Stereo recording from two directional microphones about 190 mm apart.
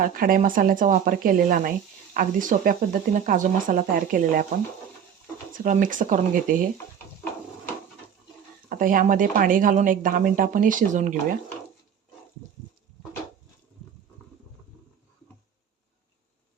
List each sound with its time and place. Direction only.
0.0 s a woman's voice: 45° right (ahead or behind)
5.6 s a woman's voice: 45° right (ahead or behind)
8.8 s a woman's voice: 45° right (ahead or behind)